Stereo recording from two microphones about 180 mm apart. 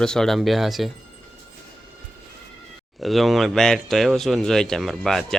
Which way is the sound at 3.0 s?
Centre (ahead or behind).